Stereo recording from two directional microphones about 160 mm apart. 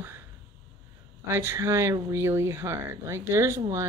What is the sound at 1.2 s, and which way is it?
Speech, 15° right (ahead or behind).